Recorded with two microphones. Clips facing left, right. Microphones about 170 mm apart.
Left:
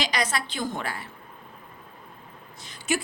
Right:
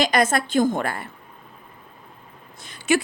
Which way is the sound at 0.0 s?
50° right (ahead or behind).